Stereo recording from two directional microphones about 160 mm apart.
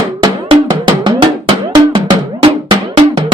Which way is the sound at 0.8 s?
30° right (ahead or behind).